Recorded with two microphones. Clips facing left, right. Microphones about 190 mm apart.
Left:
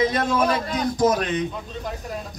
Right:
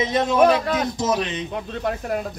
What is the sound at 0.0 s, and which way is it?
Speech, 20° right (ahead or behind).